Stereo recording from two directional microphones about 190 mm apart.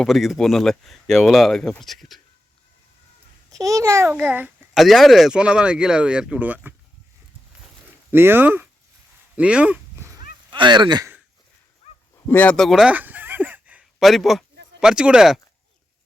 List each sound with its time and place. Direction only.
0.0 s a child's voice: centre (ahead or behind)
3.5 s a child's voice: 15° right (ahead or behind)
8.1 s speech: 10° right (ahead or behind)
9.3 s a sound: 5° right (ahead or behind)
10.5 s speech: 25° right (ahead or behind)
12.3 s a child's voice: 10° left (ahead or behind)